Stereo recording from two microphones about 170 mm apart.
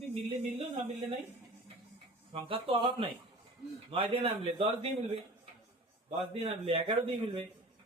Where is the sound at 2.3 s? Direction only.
35° right (ahead or behind).